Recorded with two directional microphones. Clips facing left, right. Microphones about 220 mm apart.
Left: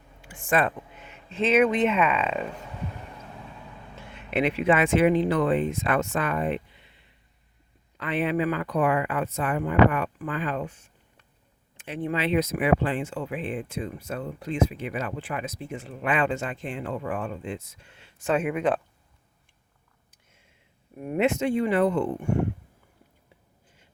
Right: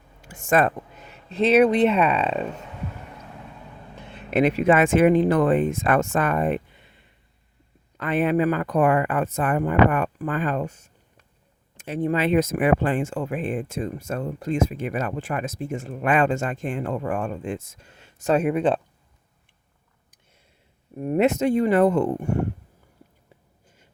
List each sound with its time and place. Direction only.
0.2 s speech: 40° right (ahead or behind)
4.1 s speech: 40° right (ahead or behind)
7.9 s speech: 45° right (ahead or behind); by 18.8 s 30° right (ahead or behind)
21.0 s speech: 40° right (ahead or behind)